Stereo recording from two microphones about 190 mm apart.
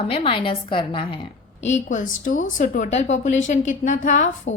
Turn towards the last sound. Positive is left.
turn(degrees=40)  # may be behind; listen again after turning